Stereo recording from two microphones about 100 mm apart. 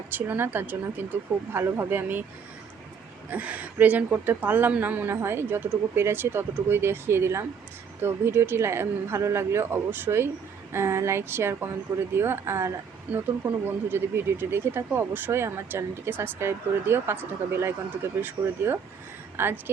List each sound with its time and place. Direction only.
0.1 s speech: 20° right (ahead or behind)
3.2 s speech: 15° right (ahead or behind)